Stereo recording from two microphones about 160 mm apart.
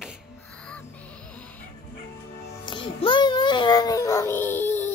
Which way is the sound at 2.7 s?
30° left (ahead or behind).